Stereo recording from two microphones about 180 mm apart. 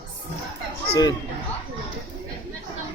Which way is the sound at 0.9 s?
20° left (ahead or behind).